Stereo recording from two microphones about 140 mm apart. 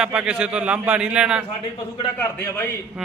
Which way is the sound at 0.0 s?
5° right (ahead or behind).